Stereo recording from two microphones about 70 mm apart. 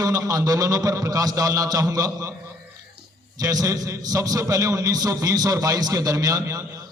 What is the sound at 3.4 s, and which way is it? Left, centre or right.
A man's voice, right.